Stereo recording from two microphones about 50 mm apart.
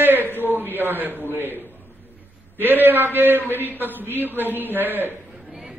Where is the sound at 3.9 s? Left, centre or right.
Right.